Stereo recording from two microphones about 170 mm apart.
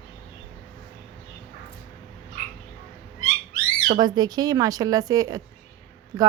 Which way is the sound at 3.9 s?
25° right (ahead or behind).